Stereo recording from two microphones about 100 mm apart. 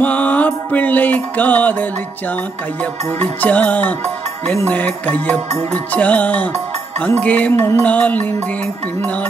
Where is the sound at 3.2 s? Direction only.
15° left (ahead or behind).